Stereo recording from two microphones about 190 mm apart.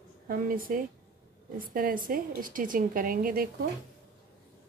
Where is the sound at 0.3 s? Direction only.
50° right (ahead or behind).